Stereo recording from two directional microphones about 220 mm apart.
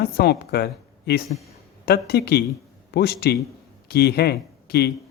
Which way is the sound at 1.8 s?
45° left (ahead or behind).